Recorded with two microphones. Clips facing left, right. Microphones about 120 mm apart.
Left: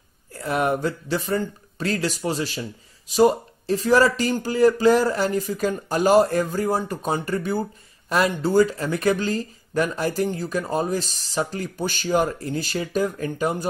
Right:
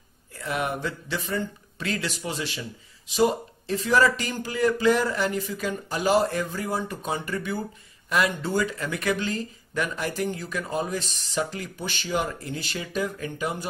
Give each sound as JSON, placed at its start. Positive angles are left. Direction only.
{"t": 0.3, "sound": "speech", "side_deg": 40}